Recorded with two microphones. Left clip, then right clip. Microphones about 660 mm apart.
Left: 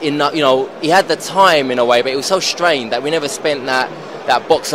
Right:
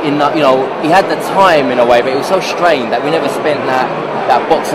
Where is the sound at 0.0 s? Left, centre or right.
Left.